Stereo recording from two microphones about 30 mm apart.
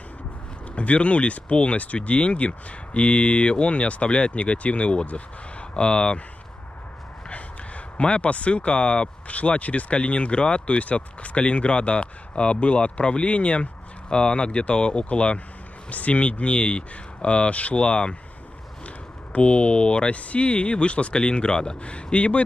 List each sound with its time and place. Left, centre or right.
0.7 s speech: left
7.2 s a sound: left
9.3 s speech: left
14.1 s speech: left
17.7 s speech: left
19.3 s speech: left